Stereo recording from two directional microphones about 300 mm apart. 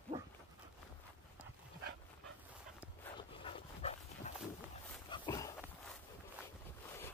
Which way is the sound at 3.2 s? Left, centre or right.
Centre.